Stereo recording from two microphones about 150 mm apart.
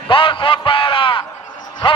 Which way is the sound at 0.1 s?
35° left (ahead or behind).